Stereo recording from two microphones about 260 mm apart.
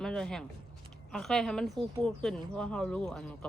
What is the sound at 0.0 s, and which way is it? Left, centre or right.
Speech, centre.